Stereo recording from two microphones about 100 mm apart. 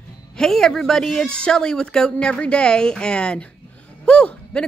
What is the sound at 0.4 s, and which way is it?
A woman's voice, 5° left (ahead or behind).